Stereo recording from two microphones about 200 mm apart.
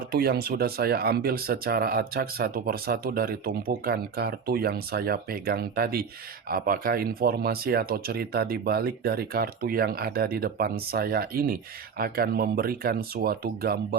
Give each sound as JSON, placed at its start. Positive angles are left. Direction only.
{"t": 0.1, "sound": "speech", "side_deg": -50}